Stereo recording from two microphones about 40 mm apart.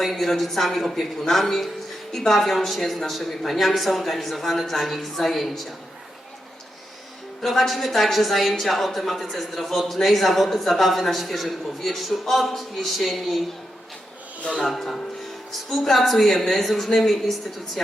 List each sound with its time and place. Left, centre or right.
0.0 s speech: centre
7.4 s speech: centre
14.6 s speech: centre